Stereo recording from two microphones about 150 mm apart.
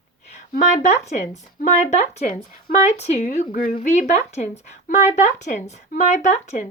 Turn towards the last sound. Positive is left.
turn(degrees=50)  # may be behind; listen again after turning